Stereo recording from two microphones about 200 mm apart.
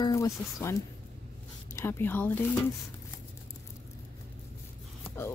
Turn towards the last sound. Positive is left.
turn(degrees=10)  # may be behind; listen again after turning